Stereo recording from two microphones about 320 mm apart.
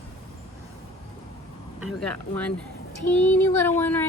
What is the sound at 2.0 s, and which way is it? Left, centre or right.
Speech, centre.